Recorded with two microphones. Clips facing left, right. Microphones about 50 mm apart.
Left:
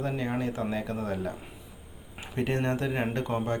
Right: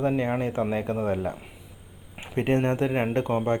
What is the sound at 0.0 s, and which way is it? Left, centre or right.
Speech, right.